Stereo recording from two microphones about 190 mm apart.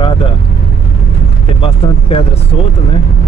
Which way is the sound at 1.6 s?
30° left (ahead or behind).